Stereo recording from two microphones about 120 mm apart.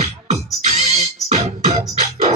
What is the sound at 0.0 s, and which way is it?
Music, 65° right (ahead or behind).